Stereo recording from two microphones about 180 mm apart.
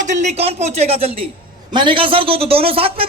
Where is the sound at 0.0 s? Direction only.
40° right (ahead or behind).